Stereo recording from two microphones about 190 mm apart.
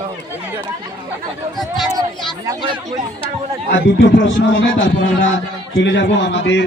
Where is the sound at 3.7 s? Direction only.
75° left (ahead or behind).